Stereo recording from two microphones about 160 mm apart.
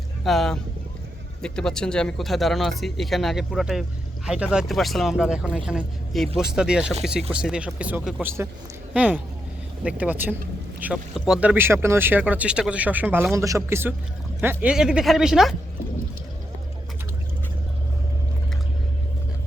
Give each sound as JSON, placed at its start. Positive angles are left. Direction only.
{"t": 0.3, "sound": "speech", "side_deg": 0}